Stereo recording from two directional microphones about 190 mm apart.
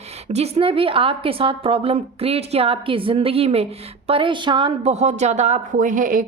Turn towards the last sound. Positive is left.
turn(degrees=-45)  # may be behind; listen again after turning